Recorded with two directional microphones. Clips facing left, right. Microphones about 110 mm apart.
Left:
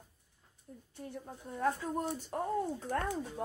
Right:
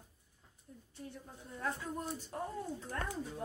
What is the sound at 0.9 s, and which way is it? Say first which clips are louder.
Speech: left 5 dB; 45° left (ahead or behind).